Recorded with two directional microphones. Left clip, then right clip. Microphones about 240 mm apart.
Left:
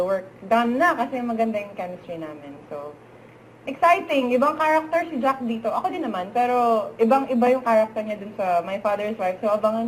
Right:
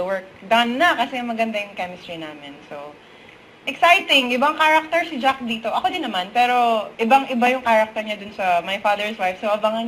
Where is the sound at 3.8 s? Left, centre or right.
Centre.